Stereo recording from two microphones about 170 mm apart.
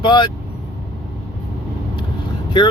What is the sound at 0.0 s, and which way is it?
Speech, 25° left (ahead or behind).